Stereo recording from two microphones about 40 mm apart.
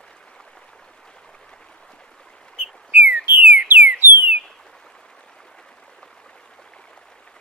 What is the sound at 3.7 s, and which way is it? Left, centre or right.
Alarm, right.